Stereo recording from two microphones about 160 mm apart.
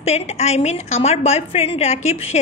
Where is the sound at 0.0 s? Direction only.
45° left (ahead or behind).